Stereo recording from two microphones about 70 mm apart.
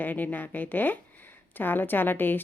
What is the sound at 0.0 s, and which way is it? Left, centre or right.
A woman's voice, left.